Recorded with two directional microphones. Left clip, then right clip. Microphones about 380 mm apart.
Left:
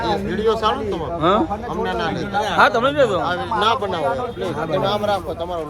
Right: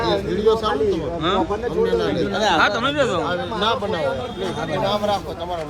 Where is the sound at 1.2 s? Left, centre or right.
Centre.